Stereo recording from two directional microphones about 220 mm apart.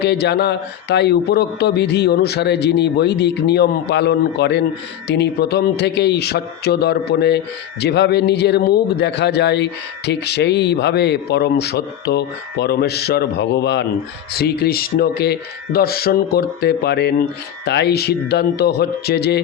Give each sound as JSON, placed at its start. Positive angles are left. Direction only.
{"t": 0.0, "sound": "speech", "side_deg": 50}